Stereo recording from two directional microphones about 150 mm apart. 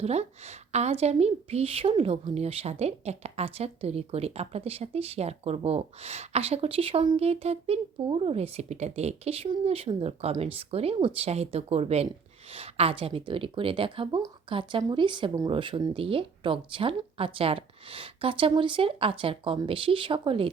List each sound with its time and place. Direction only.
0.0 s a woman's voice: 45° right (ahead or behind)